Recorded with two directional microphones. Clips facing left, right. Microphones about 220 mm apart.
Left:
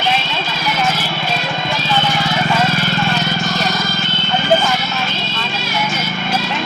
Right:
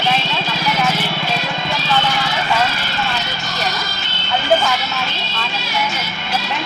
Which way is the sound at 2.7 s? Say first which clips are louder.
Left 5 dB; 50° left (ahead or behind).